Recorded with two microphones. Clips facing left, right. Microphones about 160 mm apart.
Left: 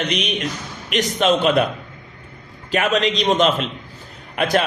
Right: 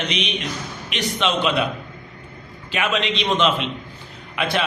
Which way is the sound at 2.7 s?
40° left (ahead or behind).